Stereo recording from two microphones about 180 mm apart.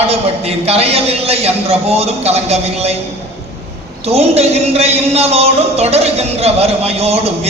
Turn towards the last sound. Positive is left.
turn(degrees=-35)  # may be behind; listen again after turning